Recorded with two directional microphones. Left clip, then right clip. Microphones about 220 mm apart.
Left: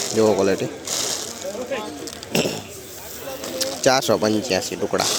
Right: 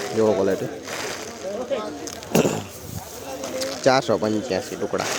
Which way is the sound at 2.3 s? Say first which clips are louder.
Right 2 dB; 25° right (ahead or behind).